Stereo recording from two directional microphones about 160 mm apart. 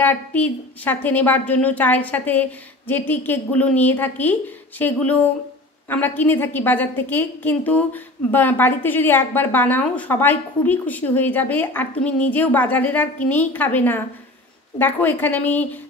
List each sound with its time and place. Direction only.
0.0 s a woman's voice: 10° left (ahead or behind)